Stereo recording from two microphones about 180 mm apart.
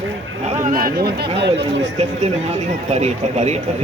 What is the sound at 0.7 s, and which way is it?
Speech, 60° right (ahead or behind).